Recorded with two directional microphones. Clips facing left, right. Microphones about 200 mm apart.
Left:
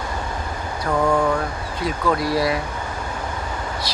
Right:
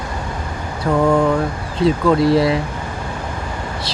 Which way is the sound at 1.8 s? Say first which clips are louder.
Right 8 dB; 25° right (ahead or behind).